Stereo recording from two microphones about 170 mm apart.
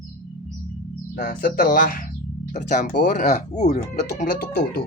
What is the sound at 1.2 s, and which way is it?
Speech, 60° left (ahead or behind).